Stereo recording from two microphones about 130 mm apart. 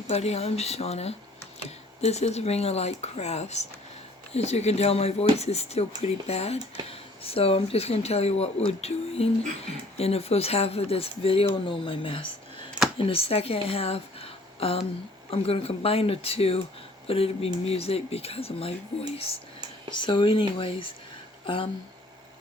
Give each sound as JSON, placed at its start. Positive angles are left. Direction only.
{"t": 0.1, "sound": "speech", "side_deg": 55}
{"t": 19.9, "sound": "speech", "side_deg": 40}